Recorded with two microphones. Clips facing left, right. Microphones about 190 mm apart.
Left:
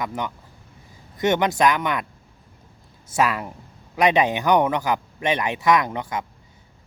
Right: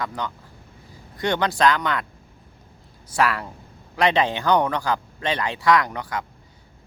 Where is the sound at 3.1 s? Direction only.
20° left (ahead or behind).